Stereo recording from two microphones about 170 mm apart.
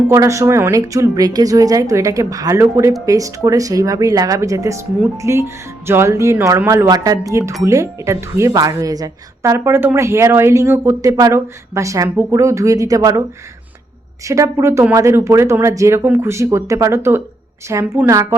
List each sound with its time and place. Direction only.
0.1 s speech: 15° right (ahead or behind)
14.3 s speech: 20° right (ahead or behind)